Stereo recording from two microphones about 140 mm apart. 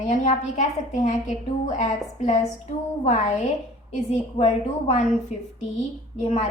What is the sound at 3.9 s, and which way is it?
A woman's voice, 50° left (ahead or behind).